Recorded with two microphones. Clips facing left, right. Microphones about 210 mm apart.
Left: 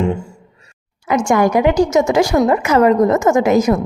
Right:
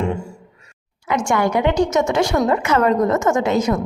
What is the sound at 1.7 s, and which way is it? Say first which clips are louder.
Speech: left 4 dB; 35° left (ahead or behind).